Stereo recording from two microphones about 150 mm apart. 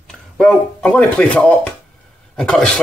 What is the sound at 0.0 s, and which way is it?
Speech, centre (ahead or behind).